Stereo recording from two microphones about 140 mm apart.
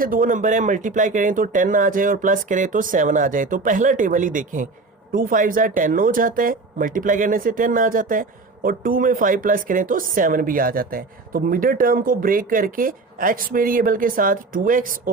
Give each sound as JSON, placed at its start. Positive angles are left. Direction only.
{"t": 0.0, "sound": "speech", "side_deg": -75}